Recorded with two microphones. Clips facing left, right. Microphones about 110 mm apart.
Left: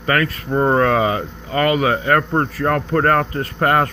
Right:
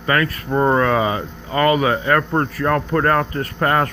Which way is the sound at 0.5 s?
30° left (ahead or behind).